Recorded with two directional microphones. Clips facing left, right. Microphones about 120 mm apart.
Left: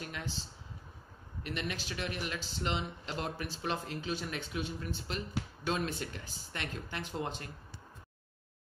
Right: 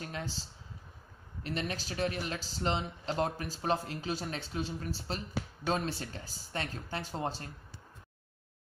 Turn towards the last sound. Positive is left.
turn(degrees=-35)  # may be behind; listen again after turning